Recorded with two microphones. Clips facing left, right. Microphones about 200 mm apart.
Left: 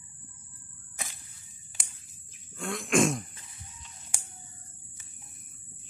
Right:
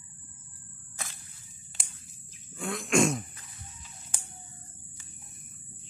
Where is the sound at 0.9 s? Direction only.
15° left (ahead or behind).